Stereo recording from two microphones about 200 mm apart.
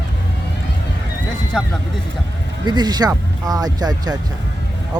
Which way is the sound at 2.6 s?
20° right (ahead or behind).